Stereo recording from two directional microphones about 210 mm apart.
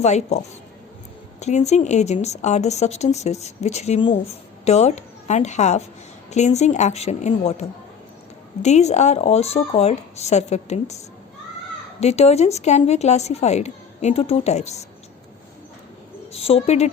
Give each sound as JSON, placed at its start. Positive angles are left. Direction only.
{"t": 0.0, "sound": "a woman's voice", "side_deg": 30}
{"t": 8.6, "sound": "speech", "side_deg": 30}
{"t": 16.3, "sound": "a woman's voice", "side_deg": 30}